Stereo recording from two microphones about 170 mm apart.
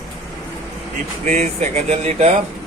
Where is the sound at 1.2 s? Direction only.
45° right (ahead or behind).